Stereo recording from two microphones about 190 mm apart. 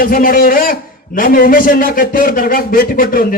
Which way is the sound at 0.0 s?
50° left (ahead or behind).